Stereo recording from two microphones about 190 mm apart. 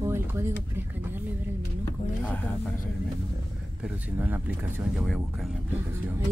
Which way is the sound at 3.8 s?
5° right (ahead or behind).